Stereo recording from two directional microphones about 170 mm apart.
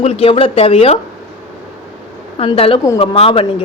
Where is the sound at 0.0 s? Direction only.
35° left (ahead or behind).